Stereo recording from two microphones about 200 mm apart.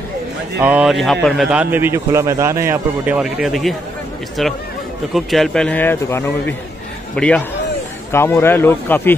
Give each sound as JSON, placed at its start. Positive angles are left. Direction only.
{"t": 0.6, "sound": "a man's voice", "side_deg": -5}